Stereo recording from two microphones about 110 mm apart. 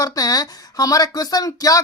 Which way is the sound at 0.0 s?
35° left (ahead or behind).